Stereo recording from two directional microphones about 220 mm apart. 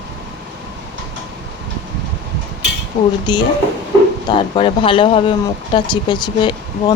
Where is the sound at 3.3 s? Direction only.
20° left (ahead or behind).